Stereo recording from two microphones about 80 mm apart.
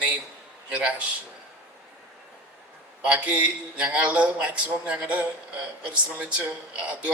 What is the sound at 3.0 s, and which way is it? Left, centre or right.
Speech, centre.